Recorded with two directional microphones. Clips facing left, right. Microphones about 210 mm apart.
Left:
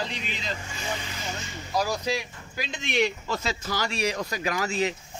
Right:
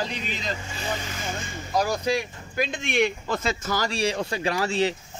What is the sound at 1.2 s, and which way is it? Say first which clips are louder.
Speech: right 3 dB; 50° right (ahead or behind).